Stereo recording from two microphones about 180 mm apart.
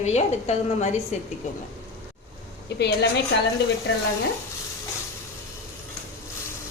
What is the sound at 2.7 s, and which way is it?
Speech, 65° left (ahead or behind).